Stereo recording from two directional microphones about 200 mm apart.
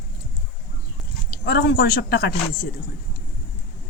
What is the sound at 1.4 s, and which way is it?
Speech, 50° left (ahead or behind).